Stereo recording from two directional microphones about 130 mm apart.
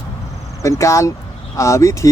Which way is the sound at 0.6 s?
25° left (ahead or behind).